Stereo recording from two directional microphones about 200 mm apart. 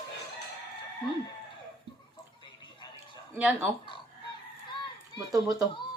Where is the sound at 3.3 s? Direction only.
5° right (ahead or behind).